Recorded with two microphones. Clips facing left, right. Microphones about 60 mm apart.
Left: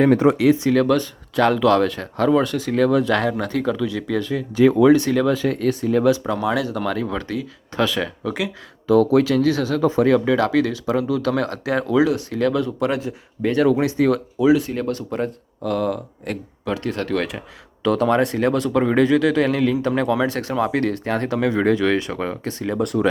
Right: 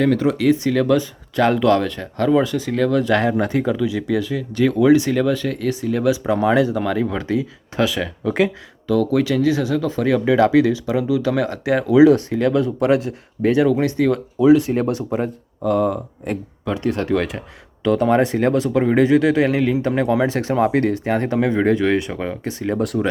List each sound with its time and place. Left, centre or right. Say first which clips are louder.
0.0 s speech: left 2 dB; left
0.3 s speech: left 1 dB; centre
3.2 s speech: right 3 dB; centre
4.5 s speech: left 1 dB; centre
6.2 s speech: right 5 dB; right
6.7 s speech: right 3 dB; centre
7.8 s speech: right 1 dB; centre
10.2 s speech: right 4 dB; centre
13.7 s speech: even; centre
14.7 s speech: right 4 dB; right
15.1 s speech: right 2 dB; centre
18.1 s speech: right 2 dB; centre
20.9 s speech: right 3 dB; centre